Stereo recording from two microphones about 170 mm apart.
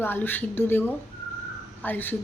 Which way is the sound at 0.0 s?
10° left (ahead or behind).